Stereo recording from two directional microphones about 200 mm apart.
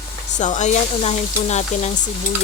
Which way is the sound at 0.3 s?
35° left (ahead or behind).